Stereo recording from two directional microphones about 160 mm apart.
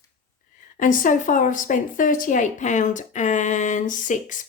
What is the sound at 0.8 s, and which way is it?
A woman's voice, 55° left (ahead or behind).